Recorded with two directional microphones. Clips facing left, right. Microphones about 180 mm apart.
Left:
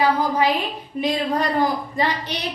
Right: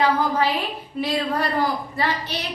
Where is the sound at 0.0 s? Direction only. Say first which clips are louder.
Left 1 dB; 15° left (ahead or behind).